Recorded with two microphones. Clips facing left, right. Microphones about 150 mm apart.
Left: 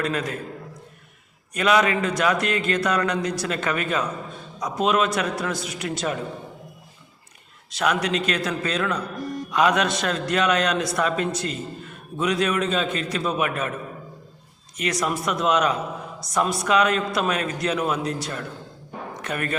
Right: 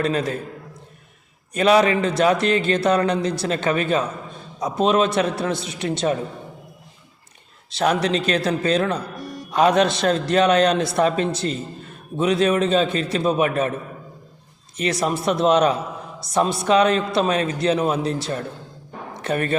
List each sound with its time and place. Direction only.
0.0 s a man's voice: 30° right (ahead or behind)
1.5 s a man's voice: 30° right (ahead or behind)
7.7 s a man's voice: 30° right (ahead or behind)
14.8 s a man's voice: 30° right (ahead or behind)